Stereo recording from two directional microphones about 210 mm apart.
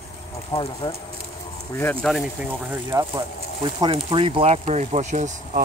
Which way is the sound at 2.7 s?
15° right (ahead or behind).